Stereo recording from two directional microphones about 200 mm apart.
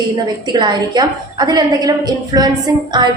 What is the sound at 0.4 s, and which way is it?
A woman's voice, 20° right (ahead or behind).